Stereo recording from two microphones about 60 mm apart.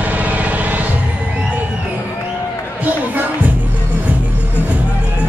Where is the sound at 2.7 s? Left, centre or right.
Right.